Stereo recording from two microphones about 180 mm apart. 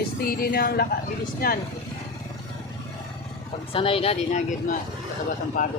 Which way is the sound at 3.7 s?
30° left (ahead or behind).